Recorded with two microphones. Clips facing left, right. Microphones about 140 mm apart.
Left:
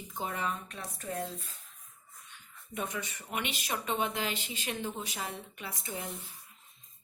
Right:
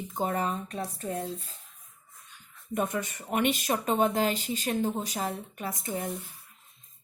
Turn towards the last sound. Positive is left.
turn(degrees=-45)  # may be behind; listen again after turning